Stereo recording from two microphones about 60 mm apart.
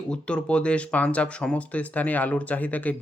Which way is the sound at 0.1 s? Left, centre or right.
Centre.